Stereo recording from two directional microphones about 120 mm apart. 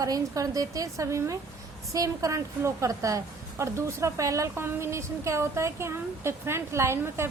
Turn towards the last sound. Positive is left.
turn(degrees=-20)  # may be behind; listen again after turning